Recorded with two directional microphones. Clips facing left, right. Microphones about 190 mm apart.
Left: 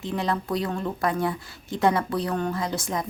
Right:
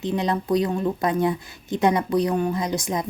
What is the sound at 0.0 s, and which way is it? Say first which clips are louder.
Speech: right 3 dB; 20° right (ahead or behind).